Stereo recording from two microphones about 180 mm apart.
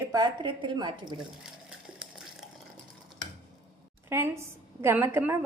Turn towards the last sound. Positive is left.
turn(degrees=-10)  # may be behind; listen again after turning